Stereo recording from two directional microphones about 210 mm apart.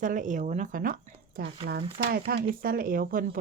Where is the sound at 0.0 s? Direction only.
40° right (ahead or behind).